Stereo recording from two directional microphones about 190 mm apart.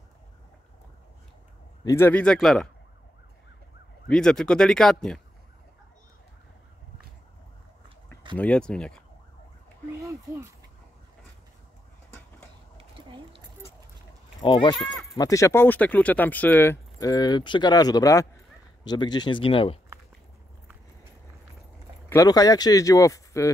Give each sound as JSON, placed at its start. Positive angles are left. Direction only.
{"t": 1.9, "sound": "speech", "side_deg": 10}
{"t": 4.1, "sound": "speech", "side_deg": 5}
{"t": 8.4, "sound": "speech", "side_deg": 5}
{"t": 10.0, "sound": "speech", "side_deg": -15}
{"t": 12.7, "sound": "a sound", "side_deg": -30}
{"t": 14.4, "sound": "speech", "side_deg": 25}
{"t": 22.1, "sound": "speech", "side_deg": 20}